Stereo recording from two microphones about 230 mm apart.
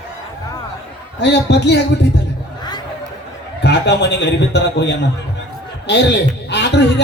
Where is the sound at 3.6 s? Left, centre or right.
Left.